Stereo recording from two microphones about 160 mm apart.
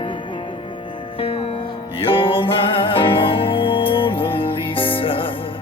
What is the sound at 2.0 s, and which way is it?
Music, 35° left (ahead or behind).